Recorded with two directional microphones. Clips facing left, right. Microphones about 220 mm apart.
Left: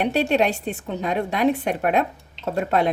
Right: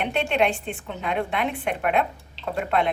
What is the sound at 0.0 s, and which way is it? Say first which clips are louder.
Speech: left 3 dB; 40° left (ahead or behind).